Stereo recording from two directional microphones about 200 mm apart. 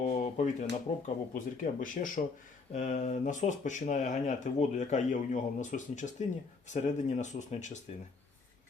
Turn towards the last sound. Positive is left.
turn(degrees=35)  # may be behind; listen again after turning